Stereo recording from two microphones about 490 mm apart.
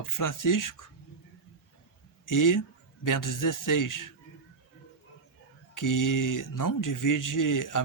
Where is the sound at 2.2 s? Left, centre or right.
Left.